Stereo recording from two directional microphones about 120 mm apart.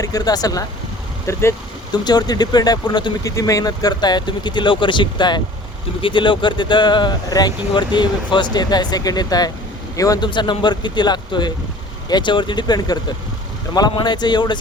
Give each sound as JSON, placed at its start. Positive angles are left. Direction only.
{"t": 0.0, "sound": "speech", "side_deg": 30}
{"t": 1.9, "sound": "speech", "side_deg": 35}
{"t": 10.2, "sound": "speech", "side_deg": 40}